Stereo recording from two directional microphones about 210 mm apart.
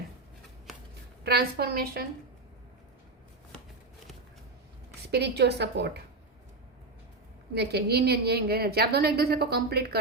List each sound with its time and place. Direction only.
1.2 s a woman's voice: 50° right (ahead or behind)
5.0 s a woman's voice: 50° right (ahead or behind)
7.5 s a woman's voice: 50° right (ahead or behind)